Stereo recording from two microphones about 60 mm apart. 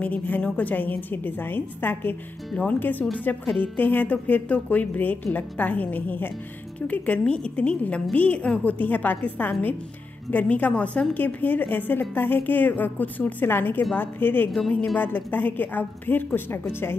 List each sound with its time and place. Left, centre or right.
0.0 s a woman's voice: left